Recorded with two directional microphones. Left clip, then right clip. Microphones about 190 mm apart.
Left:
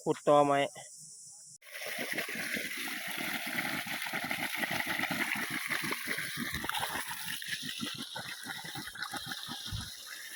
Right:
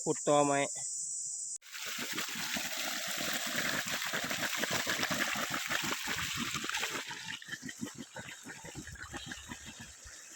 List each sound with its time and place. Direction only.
0.0 s speech: 5° right (ahead or behind)
1.9 s water: centre (ahead or behind)
5.1 s water: centre (ahead or behind)
6.6 s water: 30° left (ahead or behind)
9.0 s water: 5° left (ahead or behind)